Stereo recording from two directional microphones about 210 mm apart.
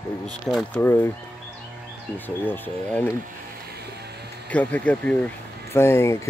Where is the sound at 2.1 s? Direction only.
10° left (ahead or behind).